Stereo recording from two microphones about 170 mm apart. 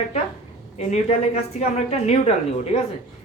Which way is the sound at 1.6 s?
40° left (ahead or behind).